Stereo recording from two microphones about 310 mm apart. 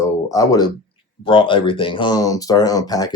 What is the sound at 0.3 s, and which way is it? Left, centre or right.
Speech, centre.